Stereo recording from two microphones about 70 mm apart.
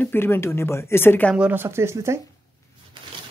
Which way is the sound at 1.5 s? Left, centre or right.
Right.